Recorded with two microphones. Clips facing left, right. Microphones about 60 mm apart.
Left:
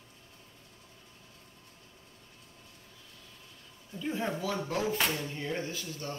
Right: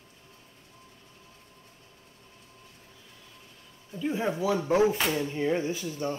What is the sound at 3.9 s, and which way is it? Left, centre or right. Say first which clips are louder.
Speech: right 4 dB; centre.